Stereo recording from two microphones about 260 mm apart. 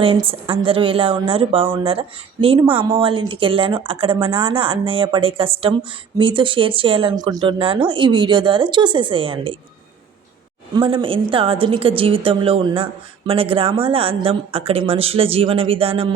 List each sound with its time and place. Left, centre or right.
0.0 s a woman's voice: right
10.8 s a woman's voice: centre